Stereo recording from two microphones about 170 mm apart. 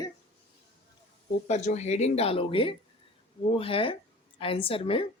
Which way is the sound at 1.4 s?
40° left (ahead or behind).